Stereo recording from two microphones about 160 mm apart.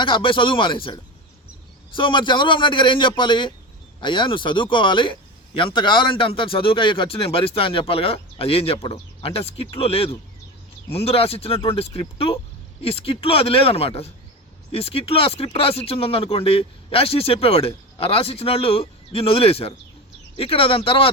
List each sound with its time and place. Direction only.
0.0 s a man's voice: 30° left (ahead or behind)